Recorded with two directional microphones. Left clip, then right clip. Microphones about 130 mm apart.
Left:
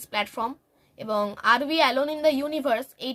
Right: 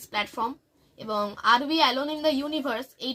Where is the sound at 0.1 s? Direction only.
35° left (ahead or behind).